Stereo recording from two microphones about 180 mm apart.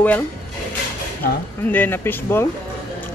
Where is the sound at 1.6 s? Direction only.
10° left (ahead or behind).